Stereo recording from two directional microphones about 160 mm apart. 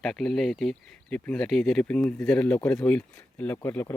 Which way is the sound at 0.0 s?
5° left (ahead or behind).